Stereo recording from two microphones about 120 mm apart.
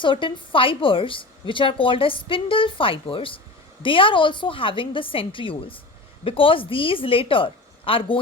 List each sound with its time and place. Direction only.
0.0 s a woman's voice: 45° left (ahead or behind)